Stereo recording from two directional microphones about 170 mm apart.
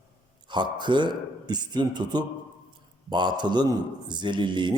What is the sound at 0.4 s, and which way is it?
Speech, 25° right (ahead or behind).